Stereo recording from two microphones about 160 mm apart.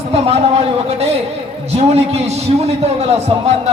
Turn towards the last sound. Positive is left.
turn(degrees=-40)  # may be behind; listen again after turning